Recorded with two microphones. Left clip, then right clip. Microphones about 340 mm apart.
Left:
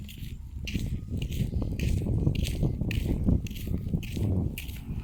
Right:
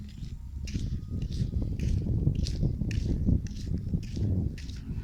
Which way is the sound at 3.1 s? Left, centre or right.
Left.